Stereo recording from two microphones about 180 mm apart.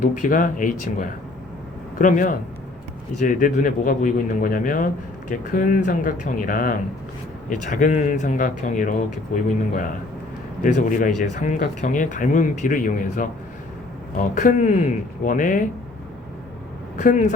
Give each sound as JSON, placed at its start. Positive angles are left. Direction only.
{"t": 0.0, "sound": "speech", "side_deg": 45}
{"t": 14.3, "sound": "speech", "side_deg": 45}
{"t": 17.0, "sound": "speech", "side_deg": 45}